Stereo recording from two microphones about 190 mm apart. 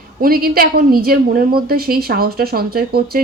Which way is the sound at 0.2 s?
50° right (ahead or behind).